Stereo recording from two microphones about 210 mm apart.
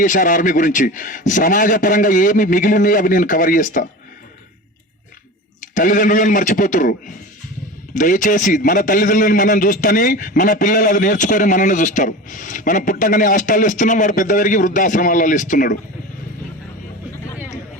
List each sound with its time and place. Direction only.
0.0 s a man's voice: 40° left (ahead or behind)
5.7 s a man's voice: 40° left (ahead or behind)
7.9 s a man's voice: 40° left (ahead or behind)